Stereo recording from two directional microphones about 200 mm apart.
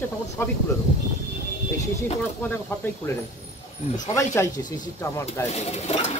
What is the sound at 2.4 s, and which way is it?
Speech, 10° left (ahead or behind).